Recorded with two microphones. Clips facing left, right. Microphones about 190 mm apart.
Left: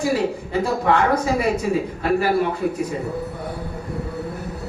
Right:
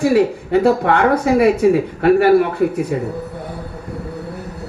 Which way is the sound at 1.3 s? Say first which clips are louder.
Right 7 dB; 60° right (ahead or behind).